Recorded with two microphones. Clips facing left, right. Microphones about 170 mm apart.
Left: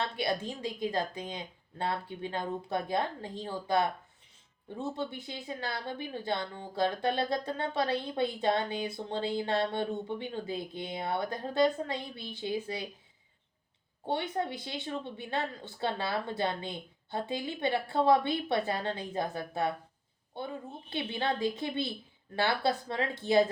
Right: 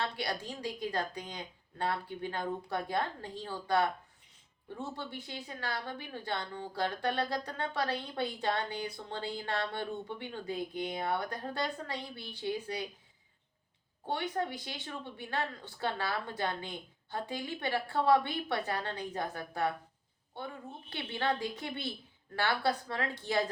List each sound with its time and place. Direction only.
0.2 s a woman's voice: 25° left (ahead or behind)
4.9 s a woman's voice: 20° left (ahead or behind)
14.1 s a woman's voice: 20° left (ahead or behind)
20.9 s a woman's voice: 25° left (ahead or behind)